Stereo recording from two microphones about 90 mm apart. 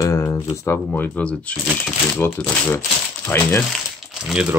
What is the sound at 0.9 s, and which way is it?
Speech, 15° left (ahead or behind).